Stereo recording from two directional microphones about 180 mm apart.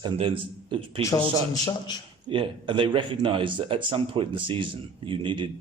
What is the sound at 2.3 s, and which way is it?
Speech, 25° right (ahead or behind).